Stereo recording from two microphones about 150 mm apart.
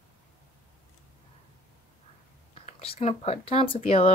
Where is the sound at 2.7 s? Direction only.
45° left (ahead or behind).